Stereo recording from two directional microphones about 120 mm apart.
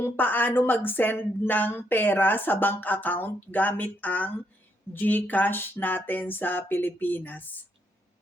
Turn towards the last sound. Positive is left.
turn(degrees=15)  # may be behind; listen again after turning